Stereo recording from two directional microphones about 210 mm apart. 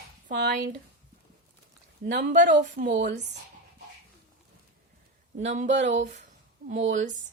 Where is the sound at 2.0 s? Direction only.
40° right (ahead or behind).